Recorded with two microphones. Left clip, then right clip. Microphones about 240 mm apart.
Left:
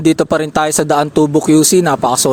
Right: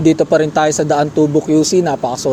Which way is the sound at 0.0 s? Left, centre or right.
Left.